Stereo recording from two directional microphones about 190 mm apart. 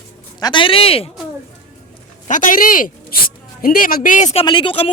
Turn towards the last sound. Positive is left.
turn(degrees=30)  # may be behind; listen again after turning